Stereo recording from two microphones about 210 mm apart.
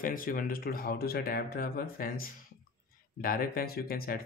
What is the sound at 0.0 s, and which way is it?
Speech, 40° left (ahead or behind).